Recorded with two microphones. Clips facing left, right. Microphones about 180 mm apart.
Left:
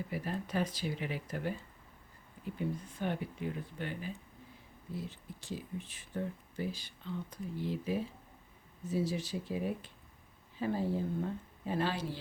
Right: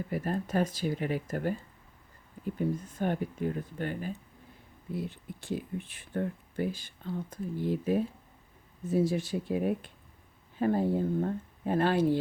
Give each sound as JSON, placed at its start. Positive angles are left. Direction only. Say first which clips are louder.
{"t": 0.1, "sound": "speech", "louder": "right 7 dB", "side_deg": -45}
{"t": 4.9, "sound": "speech", "louder": "right 6 dB", "side_deg": -60}